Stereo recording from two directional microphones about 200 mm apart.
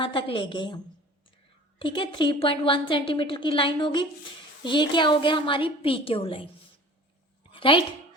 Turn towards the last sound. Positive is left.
turn(degrees=25)  # may be behind; listen again after turning